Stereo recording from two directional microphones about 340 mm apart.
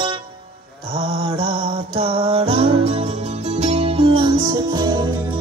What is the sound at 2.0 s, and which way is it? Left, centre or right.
Music, centre.